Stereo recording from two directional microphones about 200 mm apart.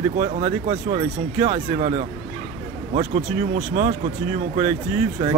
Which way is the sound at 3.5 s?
40° right (ahead or behind).